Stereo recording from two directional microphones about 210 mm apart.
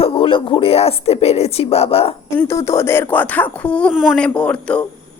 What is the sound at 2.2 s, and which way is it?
Speech, 15° left (ahead or behind).